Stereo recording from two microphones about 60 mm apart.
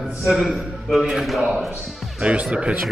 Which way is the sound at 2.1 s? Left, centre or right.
Right.